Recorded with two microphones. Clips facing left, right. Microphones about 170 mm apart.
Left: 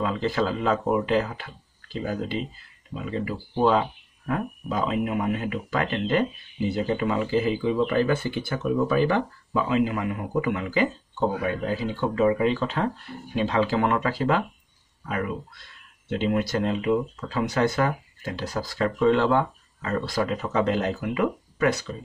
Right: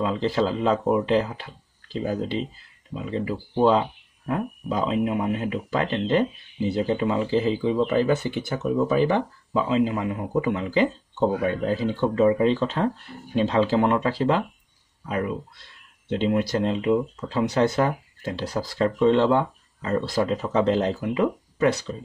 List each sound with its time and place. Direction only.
0.0 s speech: 25° right (ahead or behind)